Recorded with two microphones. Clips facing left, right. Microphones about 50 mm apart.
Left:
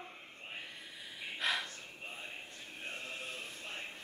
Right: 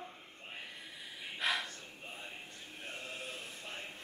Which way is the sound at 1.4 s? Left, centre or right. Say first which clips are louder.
Right 1 dB; centre.